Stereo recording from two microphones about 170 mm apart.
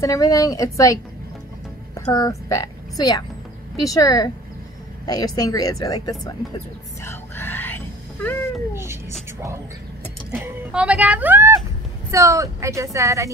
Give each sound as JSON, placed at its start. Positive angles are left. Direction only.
{"t": 0.0, "sound": "a woman's voice", "side_deg": 20}
{"t": 2.0, "sound": "a woman's voice", "side_deg": 20}
{"t": 7.0, "sound": "squeal", "side_deg": 15}
{"t": 10.3, "sound": "speech", "side_deg": -5}